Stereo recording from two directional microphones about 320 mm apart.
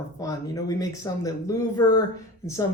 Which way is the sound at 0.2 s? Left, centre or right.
Centre.